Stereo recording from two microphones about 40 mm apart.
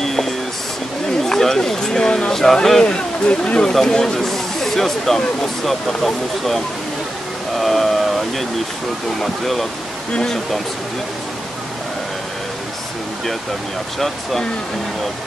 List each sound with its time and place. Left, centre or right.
0.0 s music: centre
1.2 s speech: centre
2.8 s speech: left
3.7 s speech: centre
7.5 s a sound: centre
9.2 s speech: centre
13.9 s speech: centre